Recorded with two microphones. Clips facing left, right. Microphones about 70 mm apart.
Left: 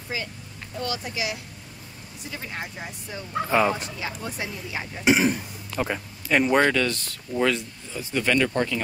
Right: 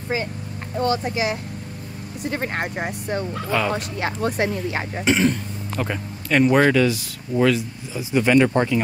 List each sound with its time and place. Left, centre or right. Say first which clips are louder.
0.1 s speech: right 6 dB; right
2.2 s speech: right 9 dB; right
3.3 s speech: left 4 dB; centre
3.7 s speech: right 7 dB; right
5.0 s speech: right 1 dB; centre
8.0 s speech: right 6 dB; centre